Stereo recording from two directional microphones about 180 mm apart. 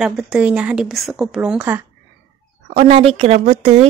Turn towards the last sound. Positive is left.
turn(degrees=-35)  # may be behind; listen again after turning